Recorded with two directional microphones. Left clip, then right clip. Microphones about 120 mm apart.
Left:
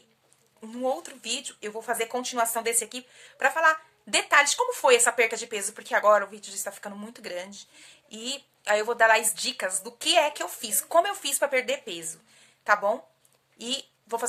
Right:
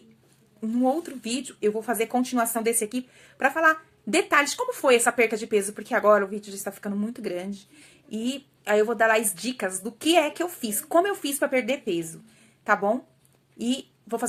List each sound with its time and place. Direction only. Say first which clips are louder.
0.6 s a woman's voice: right 4 dB; 20° left (ahead or behind)